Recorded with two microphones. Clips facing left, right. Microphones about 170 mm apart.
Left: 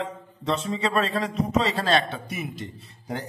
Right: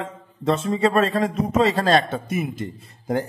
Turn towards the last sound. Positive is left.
turn(degrees=-50)  # may be behind; listen again after turning